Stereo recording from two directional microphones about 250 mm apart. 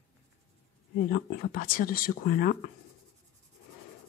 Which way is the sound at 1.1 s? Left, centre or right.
Left.